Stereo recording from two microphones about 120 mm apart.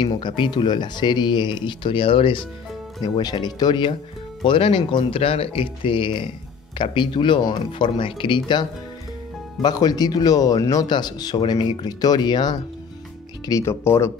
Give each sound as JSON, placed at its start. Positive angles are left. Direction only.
{"t": 0.0, "sound": "speech", "side_deg": 40}
{"t": 3.0, "sound": "speech", "side_deg": 35}
{"t": 13.5, "sound": "speech", "side_deg": 25}